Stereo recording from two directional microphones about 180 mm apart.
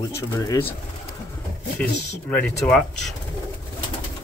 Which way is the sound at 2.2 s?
5° left (ahead or behind).